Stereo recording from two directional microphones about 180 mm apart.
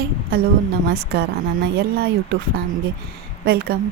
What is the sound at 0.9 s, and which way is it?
Speech, 65° right (ahead or behind).